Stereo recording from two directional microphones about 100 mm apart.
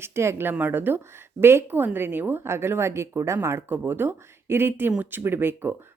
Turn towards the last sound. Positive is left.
turn(degrees=-20)  # may be behind; listen again after turning